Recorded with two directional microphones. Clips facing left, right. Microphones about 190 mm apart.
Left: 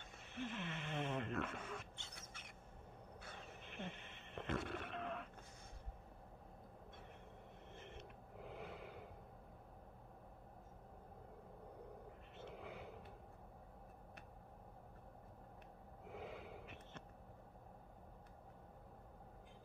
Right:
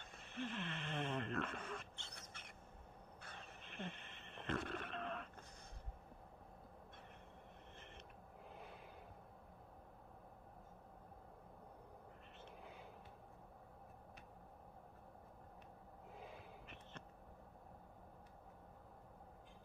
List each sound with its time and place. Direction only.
0.4 s a sound: 10° left (ahead or behind)
3.3 s a sound: 15° left (ahead or behind)
4.5 s wild animals: 10° left (ahead or behind)
8.5 s snort: 75° left (ahead or behind)
12.4 s vehicle: 70° left (ahead or behind)
16.2 s wheeze: 75° left (ahead or behind)